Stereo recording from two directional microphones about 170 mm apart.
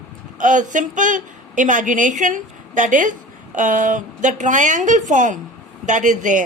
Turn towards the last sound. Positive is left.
turn(degrees=-50)  # may be behind; listen again after turning